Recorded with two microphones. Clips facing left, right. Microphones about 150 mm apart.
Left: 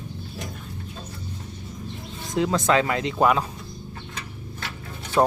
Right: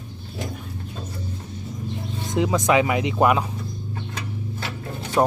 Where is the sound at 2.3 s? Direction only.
15° right (ahead or behind).